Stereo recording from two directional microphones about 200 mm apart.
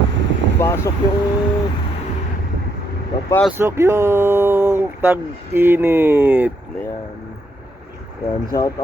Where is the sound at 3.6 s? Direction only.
15° right (ahead or behind).